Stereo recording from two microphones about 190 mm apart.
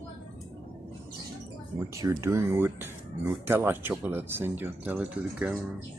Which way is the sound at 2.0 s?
15° right (ahead or behind).